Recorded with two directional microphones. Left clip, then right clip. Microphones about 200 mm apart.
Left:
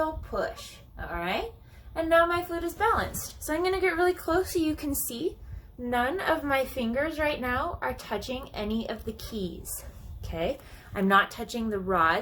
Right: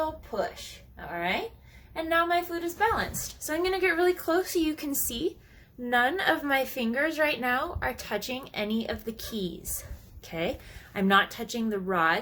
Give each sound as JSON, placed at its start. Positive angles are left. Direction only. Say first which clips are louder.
{"t": 0.0, "sound": "a woman's voice", "louder": "left 1 dB", "side_deg": -10}